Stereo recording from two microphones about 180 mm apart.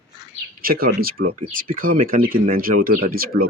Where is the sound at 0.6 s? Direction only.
55° right (ahead or behind).